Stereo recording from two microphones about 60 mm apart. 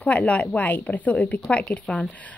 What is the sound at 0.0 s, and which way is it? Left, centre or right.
A woman's voice, left.